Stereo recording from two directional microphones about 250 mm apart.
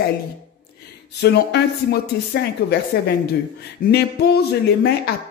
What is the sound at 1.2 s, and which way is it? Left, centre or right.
A woman's voice, left.